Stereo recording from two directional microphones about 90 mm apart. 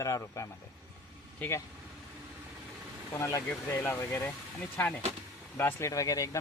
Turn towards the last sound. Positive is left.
turn(degrees=40)  # may be behind; listen again after turning